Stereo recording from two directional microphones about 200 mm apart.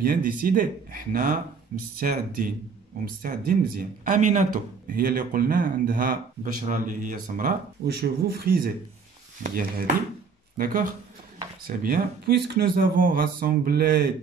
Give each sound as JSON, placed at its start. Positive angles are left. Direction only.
{"t": 0.0, "sound": "speech", "side_deg": -45}